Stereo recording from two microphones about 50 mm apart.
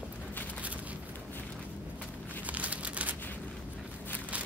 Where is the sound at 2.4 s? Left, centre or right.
Right.